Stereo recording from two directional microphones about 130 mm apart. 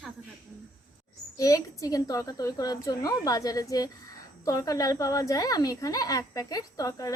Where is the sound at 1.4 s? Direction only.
25° left (ahead or behind).